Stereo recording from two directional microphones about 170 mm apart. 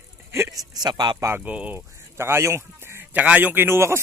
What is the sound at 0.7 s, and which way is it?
Speech, 25° right (ahead or behind).